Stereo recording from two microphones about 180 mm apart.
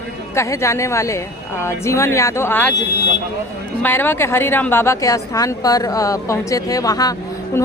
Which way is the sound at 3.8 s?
10° left (ahead or behind).